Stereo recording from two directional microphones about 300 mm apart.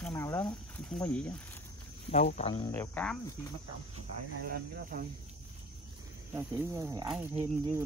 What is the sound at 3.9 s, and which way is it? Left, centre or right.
Speech, right.